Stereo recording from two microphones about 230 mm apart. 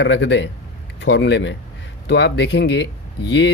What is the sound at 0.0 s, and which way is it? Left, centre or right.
Speech, left.